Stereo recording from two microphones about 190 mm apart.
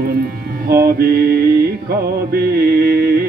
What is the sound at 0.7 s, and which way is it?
Music, 50° right (ahead or behind).